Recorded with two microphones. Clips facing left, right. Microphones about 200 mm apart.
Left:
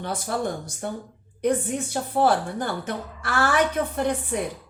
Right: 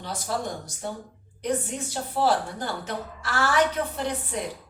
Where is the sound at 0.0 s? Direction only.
55° left (ahead or behind).